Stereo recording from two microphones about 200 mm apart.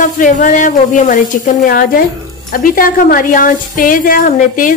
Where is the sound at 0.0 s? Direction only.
40° left (ahead or behind).